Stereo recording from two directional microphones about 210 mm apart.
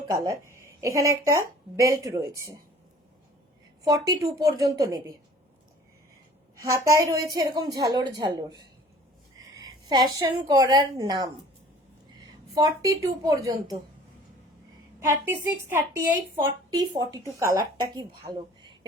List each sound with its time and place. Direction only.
0.1 s a woman's voice: 15° right (ahead or behind)
3.8 s a woman's voice: 15° right (ahead or behind)
6.6 s a woman's voice: 15° right (ahead or behind)
12.5 s a woman's voice: 15° right (ahead or behind)
15.0 s a woman's voice: 10° right (ahead or behind)
18.3 s a sound: 20° right (ahead or behind)